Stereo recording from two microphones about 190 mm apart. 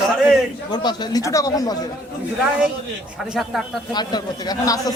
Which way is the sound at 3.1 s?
5° right (ahead or behind).